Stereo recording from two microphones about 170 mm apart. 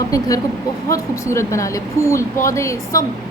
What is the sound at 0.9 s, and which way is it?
A woman's voice, 20° left (ahead or behind).